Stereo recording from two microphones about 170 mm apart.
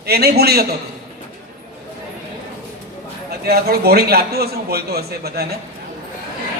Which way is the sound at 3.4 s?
65° right (ahead or behind).